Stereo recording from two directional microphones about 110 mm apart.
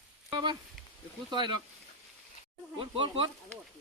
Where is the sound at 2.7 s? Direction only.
55° right (ahead or behind).